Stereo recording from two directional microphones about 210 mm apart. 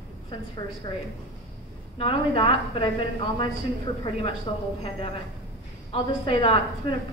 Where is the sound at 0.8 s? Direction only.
20° left (ahead or behind).